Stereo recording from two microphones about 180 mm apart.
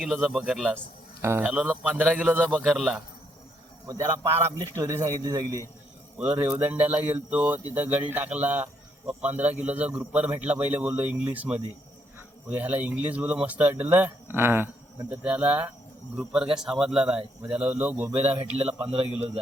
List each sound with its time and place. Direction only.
0.0 s speech: centre (ahead or behind)
1.2 s a man's voice: 15° right (ahead or behind)
3.8 s a man's voice: 20° right (ahead or behind)
6.1 s a man's voice: 10° right (ahead or behind)
12.5 s a man's voice: 10° right (ahead or behind)
18.2 s speech: 35° right (ahead or behind)